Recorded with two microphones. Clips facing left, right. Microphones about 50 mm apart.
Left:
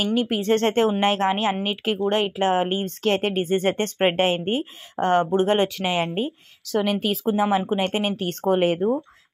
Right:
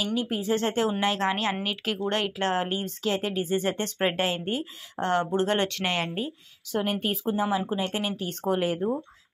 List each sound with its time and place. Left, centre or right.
0.0 s speech: left
0.9 s speech: left
2.8 s speech: left
5.7 s speech: centre
6.6 s a woman's voice: left
7.4 s speech: left
7.9 s speech: left